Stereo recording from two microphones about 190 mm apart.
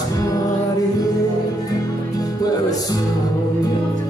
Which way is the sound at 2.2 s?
20° left (ahead or behind).